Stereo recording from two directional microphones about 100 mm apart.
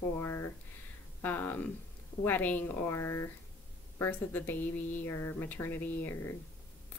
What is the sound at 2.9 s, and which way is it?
A woman's voice, 30° left (ahead or behind).